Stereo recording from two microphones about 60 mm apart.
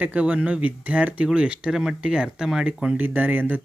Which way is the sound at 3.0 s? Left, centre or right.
Right.